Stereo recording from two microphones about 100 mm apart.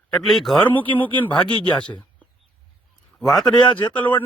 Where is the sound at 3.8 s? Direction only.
20° left (ahead or behind).